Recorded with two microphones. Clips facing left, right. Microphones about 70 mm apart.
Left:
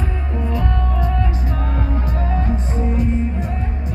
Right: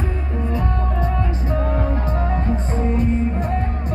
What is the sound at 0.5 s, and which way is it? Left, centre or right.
Music, right.